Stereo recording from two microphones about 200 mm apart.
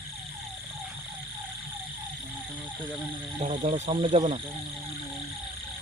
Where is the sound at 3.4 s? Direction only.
40° right (ahead or behind).